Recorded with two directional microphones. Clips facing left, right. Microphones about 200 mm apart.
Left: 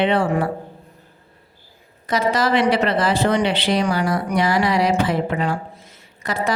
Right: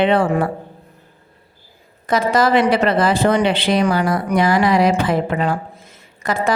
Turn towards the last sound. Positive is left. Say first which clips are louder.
# right 3 dB
turn(degrees=-50)  # may be behind; listen again after turning